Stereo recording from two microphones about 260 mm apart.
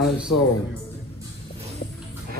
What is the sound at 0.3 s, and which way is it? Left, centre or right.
Speech, left.